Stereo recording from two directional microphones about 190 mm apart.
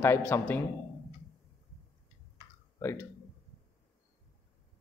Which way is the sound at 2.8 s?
15° left (ahead or behind).